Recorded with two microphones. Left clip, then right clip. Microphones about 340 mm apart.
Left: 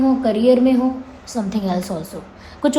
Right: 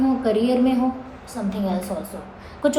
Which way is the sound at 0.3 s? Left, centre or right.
Left.